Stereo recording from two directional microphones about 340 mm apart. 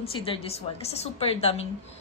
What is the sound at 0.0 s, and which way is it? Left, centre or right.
Speech, centre.